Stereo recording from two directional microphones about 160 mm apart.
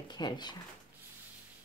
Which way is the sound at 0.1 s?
25° left (ahead or behind).